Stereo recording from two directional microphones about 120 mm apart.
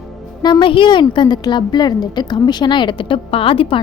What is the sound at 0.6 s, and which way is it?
A woman's voice, 45° left (ahead or behind).